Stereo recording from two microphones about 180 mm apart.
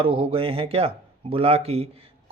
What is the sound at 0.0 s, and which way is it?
Speech, 30° right (ahead or behind).